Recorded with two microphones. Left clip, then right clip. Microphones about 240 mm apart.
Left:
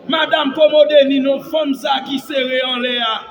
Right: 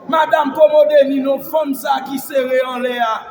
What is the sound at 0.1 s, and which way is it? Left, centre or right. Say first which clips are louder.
Music: right 2 dB; right.